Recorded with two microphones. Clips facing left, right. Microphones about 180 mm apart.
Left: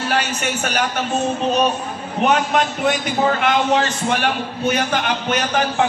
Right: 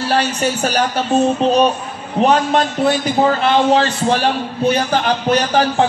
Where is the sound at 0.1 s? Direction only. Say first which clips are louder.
Right 6 dB; 35° right (ahead or behind).